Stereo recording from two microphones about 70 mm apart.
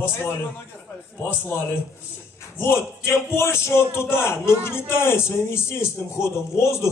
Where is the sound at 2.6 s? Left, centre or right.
Left.